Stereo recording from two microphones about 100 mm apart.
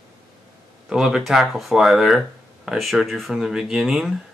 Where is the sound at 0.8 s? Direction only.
5° right (ahead or behind).